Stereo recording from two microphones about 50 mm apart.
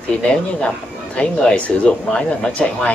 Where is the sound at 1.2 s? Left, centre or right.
Left.